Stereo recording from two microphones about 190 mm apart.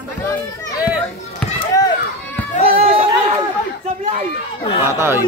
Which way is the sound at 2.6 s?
30° right (ahead or behind).